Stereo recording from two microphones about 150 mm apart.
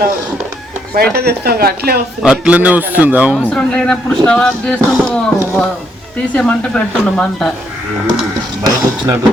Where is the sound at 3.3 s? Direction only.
10° left (ahead or behind).